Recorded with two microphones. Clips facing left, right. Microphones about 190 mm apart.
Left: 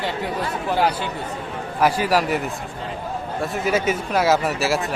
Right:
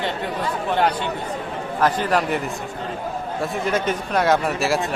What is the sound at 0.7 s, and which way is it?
A man's voice, 5° left (ahead or behind).